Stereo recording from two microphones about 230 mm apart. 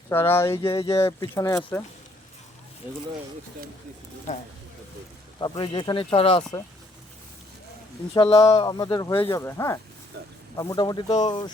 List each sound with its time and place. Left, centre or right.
0.1 s speech: centre
5.4 s speech: centre
8.1 s speech: left